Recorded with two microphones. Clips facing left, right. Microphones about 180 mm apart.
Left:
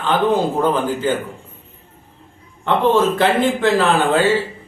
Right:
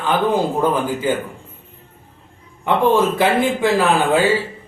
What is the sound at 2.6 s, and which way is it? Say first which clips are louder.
A man's voice: even; 10° right (ahead or behind).